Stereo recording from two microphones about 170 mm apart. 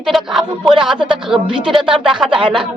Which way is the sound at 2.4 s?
30° right (ahead or behind).